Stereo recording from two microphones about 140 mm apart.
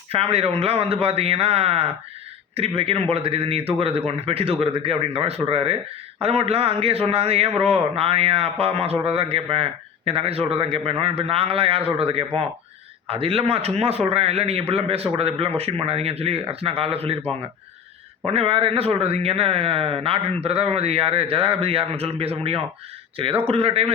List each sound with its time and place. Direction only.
0.1 s a man's voice: 45° right (ahead or behind)